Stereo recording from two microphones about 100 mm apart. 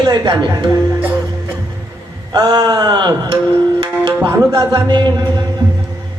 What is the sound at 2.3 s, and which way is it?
Music, 45° right (ahead or behind).